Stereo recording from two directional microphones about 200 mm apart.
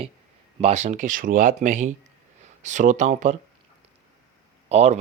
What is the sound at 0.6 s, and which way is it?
Speech, 35° right (ahead or behind).